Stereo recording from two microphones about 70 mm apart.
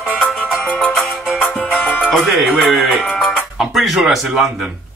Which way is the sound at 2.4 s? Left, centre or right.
Centre.